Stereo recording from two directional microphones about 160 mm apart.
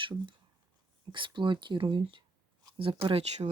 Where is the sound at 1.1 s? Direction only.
30° right (ahead or behind).